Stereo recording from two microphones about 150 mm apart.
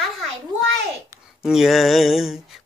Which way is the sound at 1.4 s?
5° right (ahead or behind).